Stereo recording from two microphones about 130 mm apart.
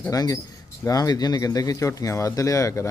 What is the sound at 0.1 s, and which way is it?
Speech, 25° left (ahead or behind).